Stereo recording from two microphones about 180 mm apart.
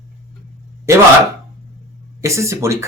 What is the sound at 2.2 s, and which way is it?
Speech, 15° right (ahead or behind).